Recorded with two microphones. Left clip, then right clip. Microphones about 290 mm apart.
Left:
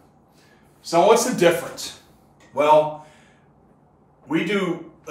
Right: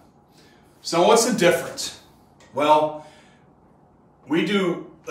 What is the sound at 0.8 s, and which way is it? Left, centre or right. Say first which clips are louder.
Speech: left 1 dB; centre.